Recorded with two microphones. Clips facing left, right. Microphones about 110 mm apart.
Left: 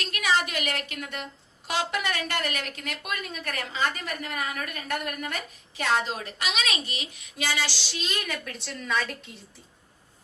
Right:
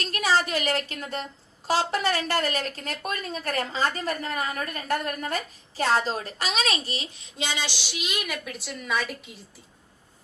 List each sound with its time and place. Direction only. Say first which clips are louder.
0.0 s a woman's voice: right 2 dB; 35° right (ahead or behind); by 9.1 s 5° right (ahead or behind)